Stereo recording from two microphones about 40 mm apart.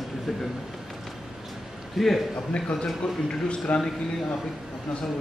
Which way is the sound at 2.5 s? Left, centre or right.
Left.